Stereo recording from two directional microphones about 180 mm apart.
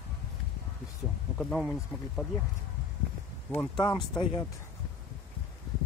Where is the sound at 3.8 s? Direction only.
25° left (ahead or behind).